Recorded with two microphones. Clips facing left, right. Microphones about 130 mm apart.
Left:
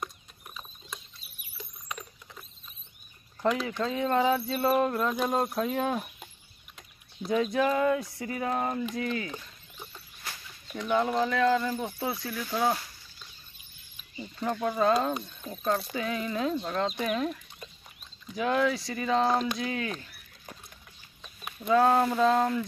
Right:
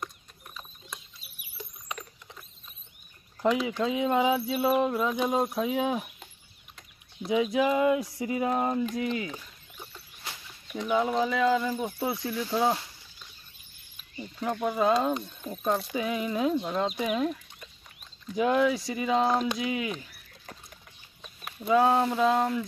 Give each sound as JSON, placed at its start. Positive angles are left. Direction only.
{"t": 3.4, "sound": "speech", "side_deg": -5}
{"t": 7.2, "sound": "speech", "side_deg": -10}
{"t": 10.2, "sound": "bird", "side_deg": -20}
{"t": 10.9, "sound": "speech", "side_deg": -5}
{"t": 14.4, "sound": "speech", "side_deg": -5}
{"t": 21.5, "sound": "speech", "side_deg": -5}